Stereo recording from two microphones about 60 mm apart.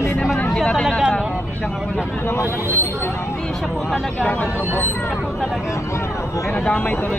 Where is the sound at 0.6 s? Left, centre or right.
Centre.